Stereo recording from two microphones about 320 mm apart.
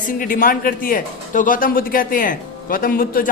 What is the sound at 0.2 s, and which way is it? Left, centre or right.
Speech, left.